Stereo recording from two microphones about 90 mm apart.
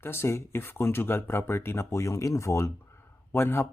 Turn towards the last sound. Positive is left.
turn(degrees=25)  # may be behind; listen again after turning